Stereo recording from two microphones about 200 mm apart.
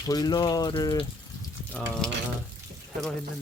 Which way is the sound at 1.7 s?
5° left (ahead or behind).